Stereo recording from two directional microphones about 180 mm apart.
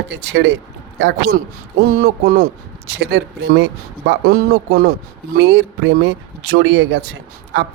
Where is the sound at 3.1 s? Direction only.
75° right (ahead or behind); by 4.9 s 55° right (ahead or behind).